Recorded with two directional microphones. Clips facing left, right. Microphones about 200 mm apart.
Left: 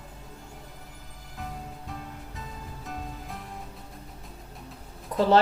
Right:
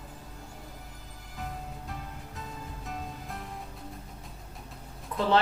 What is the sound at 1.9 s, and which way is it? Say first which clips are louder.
Music: left 2 dB; centre (ahead or behind).